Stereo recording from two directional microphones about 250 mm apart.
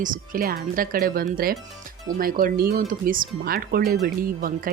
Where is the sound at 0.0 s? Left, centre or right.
Right.